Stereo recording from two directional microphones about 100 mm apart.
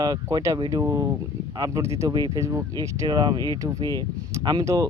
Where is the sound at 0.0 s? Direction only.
40° right (ahead or behind).